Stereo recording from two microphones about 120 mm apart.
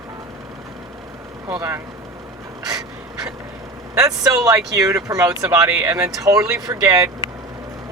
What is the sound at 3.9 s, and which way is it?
Speech, 30° right (ahead or behind).